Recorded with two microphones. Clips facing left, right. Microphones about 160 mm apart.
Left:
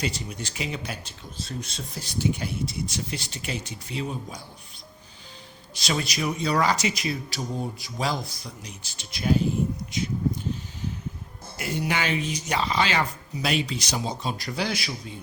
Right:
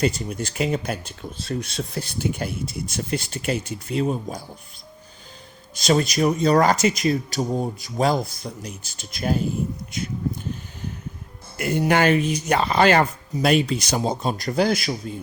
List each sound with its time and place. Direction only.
0.0 s speech: 50° right (ahead or behind)
5.7 s speech: 45° right (ahead or behind)
11.5 s speech: 55° right (ahead or behind)